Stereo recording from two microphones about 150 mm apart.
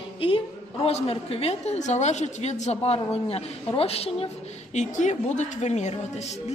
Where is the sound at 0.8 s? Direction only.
40° left (ahead or behind).